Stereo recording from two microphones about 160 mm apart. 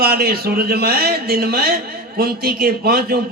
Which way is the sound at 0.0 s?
75° right (ahead or behind).